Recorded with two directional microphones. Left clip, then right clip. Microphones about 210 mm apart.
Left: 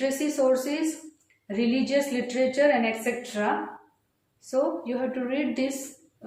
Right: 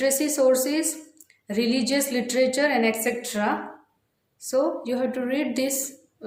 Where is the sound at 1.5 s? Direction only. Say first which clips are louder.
Right 2 dB; 55° right (ahead or behind).